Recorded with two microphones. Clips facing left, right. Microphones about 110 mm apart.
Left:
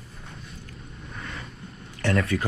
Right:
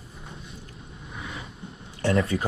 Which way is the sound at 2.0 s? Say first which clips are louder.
Right 1 dB; 30° right (ahead or behind).